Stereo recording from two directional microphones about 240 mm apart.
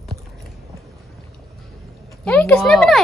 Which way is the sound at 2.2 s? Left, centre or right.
Centre.